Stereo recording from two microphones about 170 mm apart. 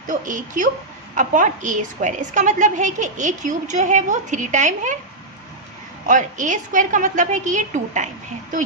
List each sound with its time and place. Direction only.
0.1 s a woman's voice: 50° right (ahead or behind)
6.1 s a woman's voice: 50° right (ahead or behind)